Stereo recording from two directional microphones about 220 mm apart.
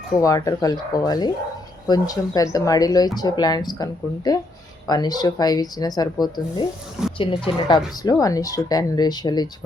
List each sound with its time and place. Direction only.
0.2 s speech: 15° left (ahead or behind)